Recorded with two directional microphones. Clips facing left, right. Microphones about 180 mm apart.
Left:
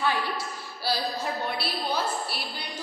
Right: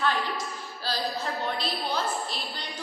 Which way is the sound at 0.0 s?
10° left (ahead or behind).